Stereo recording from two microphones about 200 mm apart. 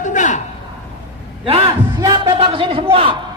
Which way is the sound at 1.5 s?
30° right (ahead or behind).